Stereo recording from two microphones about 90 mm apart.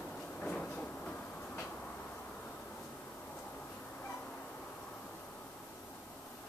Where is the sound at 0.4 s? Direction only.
10° left (ahead or behind).